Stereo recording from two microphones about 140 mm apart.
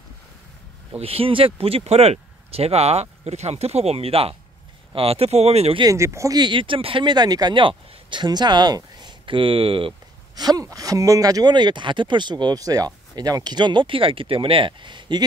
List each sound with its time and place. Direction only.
0.9 s speech: 45° right (ahead or behind)
5.8 s speech: 20° right (ahead or behind)